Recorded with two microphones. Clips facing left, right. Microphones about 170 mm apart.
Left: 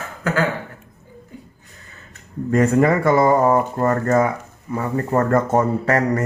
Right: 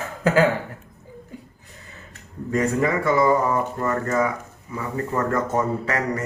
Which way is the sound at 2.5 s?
50° left (ahead or behind).